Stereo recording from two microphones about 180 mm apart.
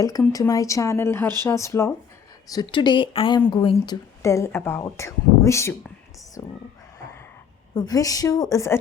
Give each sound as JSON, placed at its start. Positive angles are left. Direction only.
{"t": 0.2, "sound": "a woman's voice", "side_deg": 20}
{"t": 7.8, "sound": "a woman's voice", "side_deg": 20}